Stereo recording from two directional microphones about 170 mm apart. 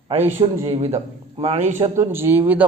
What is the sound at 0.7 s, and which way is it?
A man's voice, 40° right (ahead or behind).